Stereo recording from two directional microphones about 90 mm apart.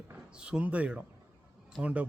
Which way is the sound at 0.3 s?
10° right (ahead or behind).